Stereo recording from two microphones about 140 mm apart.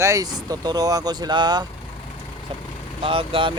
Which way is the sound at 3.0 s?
40° right (ahead or behind).